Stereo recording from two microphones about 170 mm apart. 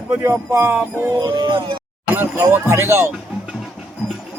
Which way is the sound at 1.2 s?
25° right (ahead or behind).